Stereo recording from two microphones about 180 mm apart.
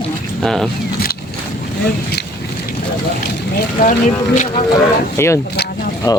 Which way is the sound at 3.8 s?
45° left (ahead or behind).